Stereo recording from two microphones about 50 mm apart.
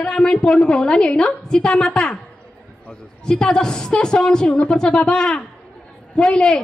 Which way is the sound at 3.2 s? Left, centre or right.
Centre.